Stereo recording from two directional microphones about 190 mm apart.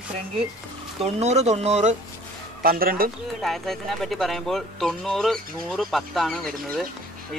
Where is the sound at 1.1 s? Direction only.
35° right (ahead or behind).